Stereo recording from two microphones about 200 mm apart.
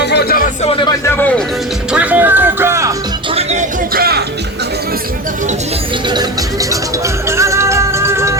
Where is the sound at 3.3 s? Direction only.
30° right (ahead or behind); by 4.2 s 50° right (ahead or behind).